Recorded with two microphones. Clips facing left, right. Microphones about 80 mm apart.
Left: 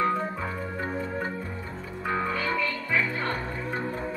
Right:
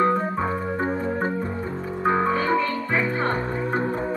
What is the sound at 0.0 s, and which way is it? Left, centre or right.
Organ, right.